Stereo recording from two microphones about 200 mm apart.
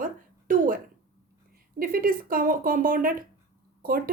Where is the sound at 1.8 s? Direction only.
45° right (ahead or behind).